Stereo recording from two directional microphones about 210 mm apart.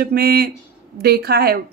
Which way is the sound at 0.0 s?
50° right (ahead or behind).